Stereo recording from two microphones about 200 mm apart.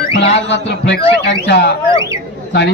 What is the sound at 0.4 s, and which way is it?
A man's voice, 60° left (ahead or behind).